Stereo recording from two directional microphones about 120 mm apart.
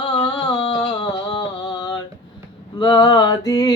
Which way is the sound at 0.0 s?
35° left (ahead or behind).